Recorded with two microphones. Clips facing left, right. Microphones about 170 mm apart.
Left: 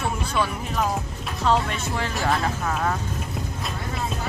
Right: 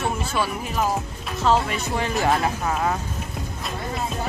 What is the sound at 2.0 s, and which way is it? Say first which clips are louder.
Speech: right 3 dB; 15° right (ahead or behind).